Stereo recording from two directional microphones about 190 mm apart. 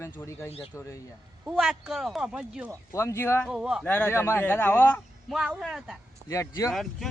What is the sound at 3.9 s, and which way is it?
Speech, 10° left (ahead or behind).